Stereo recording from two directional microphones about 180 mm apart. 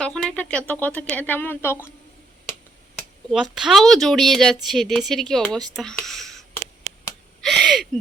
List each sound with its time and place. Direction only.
0.0 s speech: 5° left (ahead or behind)
3.3 s speech: centre (ahead or behind)
5.5 s speech: 20° right (ahead or behind)
5.7 s speech: 5° left (ahead or behind)
7.4 s speech: centre (ahead or behind)